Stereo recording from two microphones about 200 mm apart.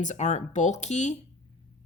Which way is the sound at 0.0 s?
35° left (ahead or behind).